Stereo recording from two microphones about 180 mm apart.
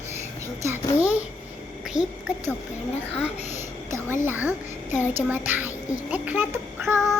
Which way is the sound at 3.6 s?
15° right (ahead or behind).